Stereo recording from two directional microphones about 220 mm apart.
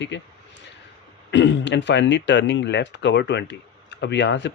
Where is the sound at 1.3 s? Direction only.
55° left (ahead or behind).